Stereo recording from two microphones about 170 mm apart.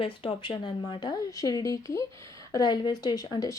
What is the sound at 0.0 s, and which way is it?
Speech, 30° left (ahead or behind).